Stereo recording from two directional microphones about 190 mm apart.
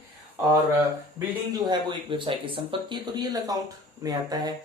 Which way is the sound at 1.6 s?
25° right (ahead or behind).